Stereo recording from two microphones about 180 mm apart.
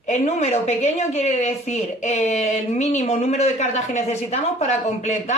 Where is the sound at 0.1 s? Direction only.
40° left (ahead or behind).